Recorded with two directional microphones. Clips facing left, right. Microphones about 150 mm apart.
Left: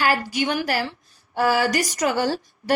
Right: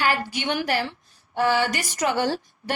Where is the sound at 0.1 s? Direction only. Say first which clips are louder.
Left 3 dB; 40° left (ahead or behind).